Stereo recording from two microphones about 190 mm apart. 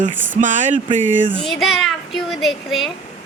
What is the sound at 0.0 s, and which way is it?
Speech, 40° right (ahead or behind).